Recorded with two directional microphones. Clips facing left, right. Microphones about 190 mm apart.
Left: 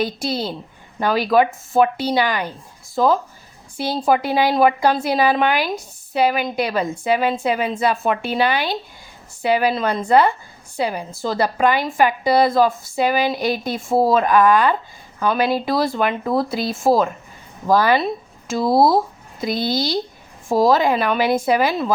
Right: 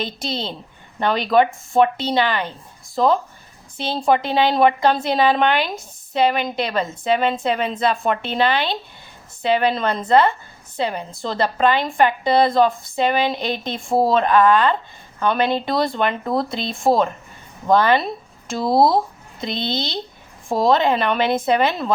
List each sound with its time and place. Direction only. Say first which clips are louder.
0.0 s a woman's voice: left 4 dB; 10° left (ahead or behind)